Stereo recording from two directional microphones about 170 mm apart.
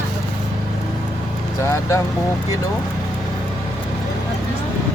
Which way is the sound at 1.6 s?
20° left (ahead or behind).